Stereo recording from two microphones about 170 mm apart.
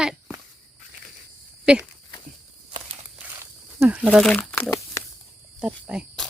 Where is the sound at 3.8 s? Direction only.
10° right (ahead or behind).